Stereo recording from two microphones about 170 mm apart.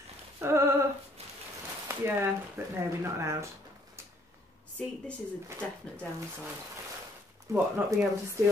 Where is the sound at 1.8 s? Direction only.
15° right (ahead or behind).